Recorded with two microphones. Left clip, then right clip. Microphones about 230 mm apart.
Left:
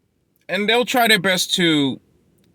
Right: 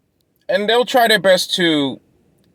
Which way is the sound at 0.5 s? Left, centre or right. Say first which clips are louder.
Right 3 dB; left.